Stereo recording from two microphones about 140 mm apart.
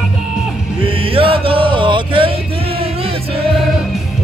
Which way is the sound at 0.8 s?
40° right (ahead or behind).